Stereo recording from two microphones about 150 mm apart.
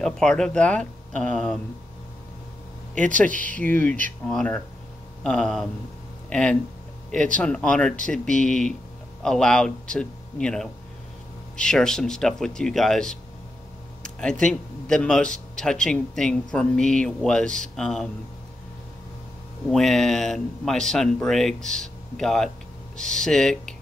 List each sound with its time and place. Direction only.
0.0 s speech: 5° left (ahead or behind)
2.9 s speech: 60° right (ahead or behind)
3.3 s speech: 10° left (ahead or behind)
14.4 s speech: 5° left (ahead or behind)
19.7 s speech: centre (ahead or behind)